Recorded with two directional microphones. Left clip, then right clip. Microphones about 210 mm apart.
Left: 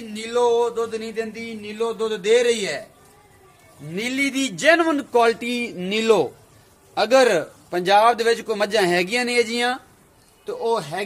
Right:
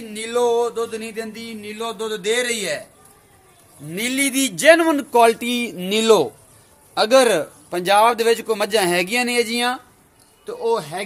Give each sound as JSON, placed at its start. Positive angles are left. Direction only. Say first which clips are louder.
{"t": 0.1, "sound": "a man's voice", "louder": "even", "side_deg": -15}
{"t": 3.9, "sound": "a man's voice", "louder": "right 2 dB", "side_deg": -40}